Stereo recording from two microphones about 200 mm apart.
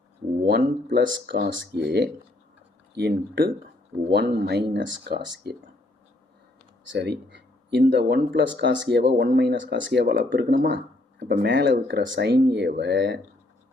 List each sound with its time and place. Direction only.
0.4 s speech: 50° right (ahead or behind)
6.9 s speech: 60° right (ahead or behind)